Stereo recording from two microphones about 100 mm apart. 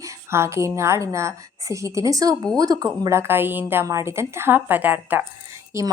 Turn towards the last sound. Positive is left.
turn(degrees=-30)  # may be behind; listen again after turning